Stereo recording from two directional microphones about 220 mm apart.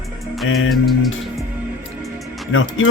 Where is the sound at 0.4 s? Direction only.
65° left (ahead or behind).